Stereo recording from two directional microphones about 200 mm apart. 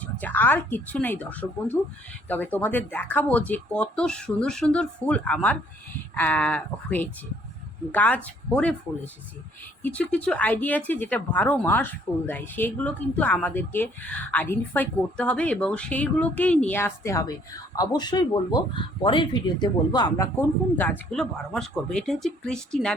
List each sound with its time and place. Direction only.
0.0 s speech: 10° left (ahead or behind)
9.8 s speech: 5° left (ahead or behind)
21.1 s speech: centre (ahead or behind)